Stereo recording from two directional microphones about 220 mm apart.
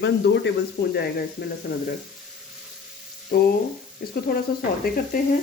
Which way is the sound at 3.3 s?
45° left (ahead or behind).